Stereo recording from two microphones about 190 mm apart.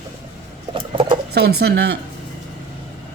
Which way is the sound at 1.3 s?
60° right (ahead or behind).